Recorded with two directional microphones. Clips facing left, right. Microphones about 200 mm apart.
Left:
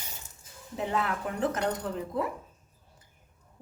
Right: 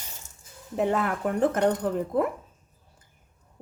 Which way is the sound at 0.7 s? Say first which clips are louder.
Right 5 dB; 50° right (ahead or behind).